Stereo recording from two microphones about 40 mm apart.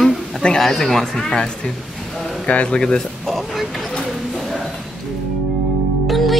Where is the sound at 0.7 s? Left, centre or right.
Centre.